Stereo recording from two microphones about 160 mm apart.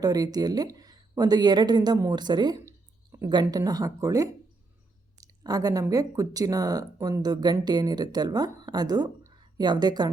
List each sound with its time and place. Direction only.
0.0 s speech: 25° right (ahead or behind)
5.2 s a sound: 25° right (ahead or behind)
5.8 s speech: 20° right (ahead or behind)